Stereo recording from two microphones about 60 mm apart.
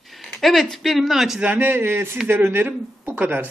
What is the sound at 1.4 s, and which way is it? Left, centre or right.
Speech, right.